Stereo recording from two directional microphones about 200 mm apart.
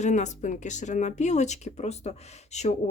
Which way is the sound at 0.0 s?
35° left (ahead or behind).